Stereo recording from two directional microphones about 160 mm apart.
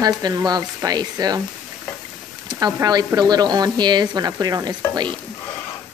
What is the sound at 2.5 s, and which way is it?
Speech, 25° right (ahead or behind).